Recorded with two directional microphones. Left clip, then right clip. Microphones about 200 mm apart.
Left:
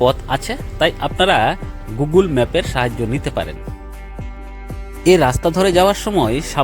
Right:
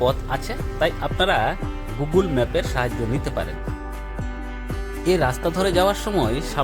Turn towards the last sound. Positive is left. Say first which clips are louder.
# left 5 dB
turn(degrees=15)  # may be behind; listen again after turning